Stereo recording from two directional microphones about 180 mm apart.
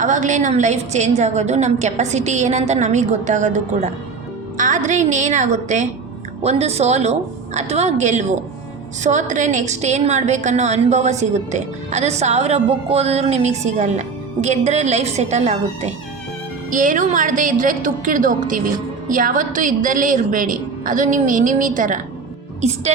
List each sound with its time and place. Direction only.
0.0 s a woman's voice: 45° right (ahead or behind)